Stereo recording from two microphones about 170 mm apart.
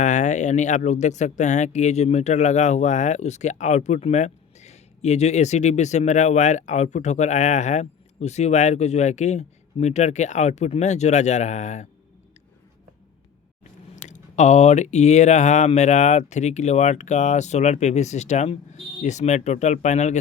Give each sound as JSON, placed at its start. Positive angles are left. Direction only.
{"t": 0.0, "sound": "speech", "side_deg": 45}
{"t": 13.9, "sound": "speech", "side_deg": 45}